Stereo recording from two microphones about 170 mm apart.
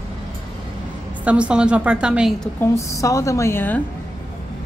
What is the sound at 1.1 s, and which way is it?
A woman's voice, 10° right (ahead or behind).